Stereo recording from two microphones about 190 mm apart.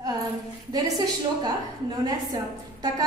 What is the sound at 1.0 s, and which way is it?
A woman's voice, 20° right (ahead or behind).